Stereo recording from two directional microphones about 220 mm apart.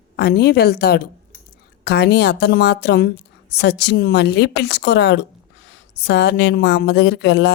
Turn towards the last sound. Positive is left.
turn(degrees=50)  # may be behind; listen again after turning